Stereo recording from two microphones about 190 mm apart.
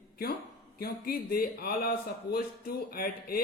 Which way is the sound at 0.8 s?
50° left (ahead or behind).